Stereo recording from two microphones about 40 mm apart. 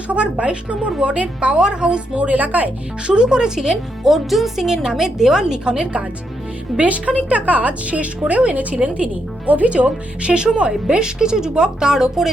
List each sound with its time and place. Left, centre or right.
0.1 s speech: right
3.1 s a woman's voice: right
4.1 s speech: centre
4.6 s a woman's voice: centre
6.7 s a woman's voice: right; by 12.3 s centre